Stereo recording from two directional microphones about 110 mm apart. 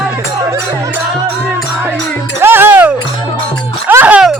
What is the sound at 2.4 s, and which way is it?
Music, 20° right (ahead or behind).